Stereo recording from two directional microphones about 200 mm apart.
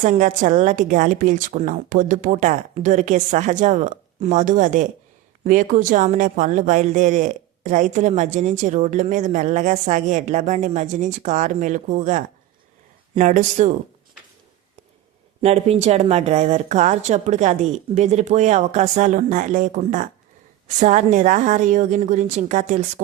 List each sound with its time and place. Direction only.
0.0 s speech: 35° right (ahead or behind)
15.4 s speech: 30° right (ahead or behind)